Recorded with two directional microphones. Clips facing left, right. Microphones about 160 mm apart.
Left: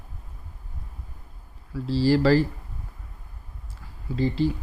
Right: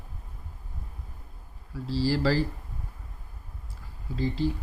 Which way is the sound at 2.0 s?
65° left (ahead or behind).